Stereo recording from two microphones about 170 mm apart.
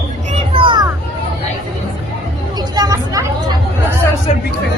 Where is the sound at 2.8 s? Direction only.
20° right (ahead or behind).